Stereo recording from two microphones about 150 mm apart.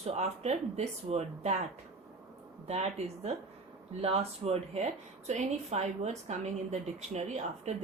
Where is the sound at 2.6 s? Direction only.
45° right (ahead or behind).